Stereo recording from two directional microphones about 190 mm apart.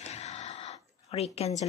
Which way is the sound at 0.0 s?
35° left (ahead or behind).